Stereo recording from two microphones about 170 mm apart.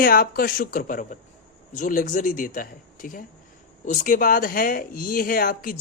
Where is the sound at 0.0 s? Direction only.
60° left (ahead or behind).